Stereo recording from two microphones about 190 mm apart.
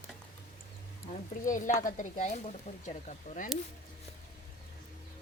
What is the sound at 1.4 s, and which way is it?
A woman's voice, 45° left (ahead or behind).